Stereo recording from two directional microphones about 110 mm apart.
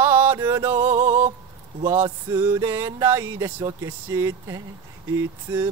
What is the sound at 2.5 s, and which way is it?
Speech, 25° right (ahead or behind).